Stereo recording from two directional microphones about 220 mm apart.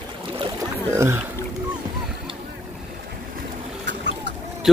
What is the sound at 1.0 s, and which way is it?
Speech, 10° right (ahead or behind).